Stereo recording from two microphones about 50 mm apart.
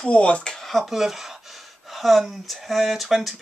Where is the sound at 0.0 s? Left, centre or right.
Left.